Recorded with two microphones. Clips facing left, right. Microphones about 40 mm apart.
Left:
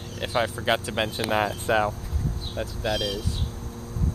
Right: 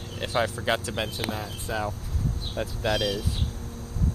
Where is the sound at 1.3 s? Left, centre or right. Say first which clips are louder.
Left 9 dB; left.